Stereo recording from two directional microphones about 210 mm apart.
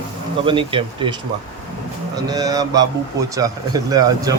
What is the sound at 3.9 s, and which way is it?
Speech, 15° right (ahead or behind).